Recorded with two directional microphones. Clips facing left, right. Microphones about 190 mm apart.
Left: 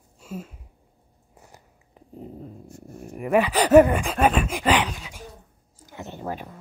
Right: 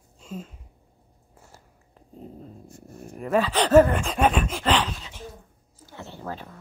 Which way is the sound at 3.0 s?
15° left (ahead or behind).